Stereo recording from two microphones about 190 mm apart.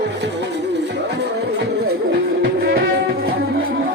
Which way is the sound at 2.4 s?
55° right (ahead or behind).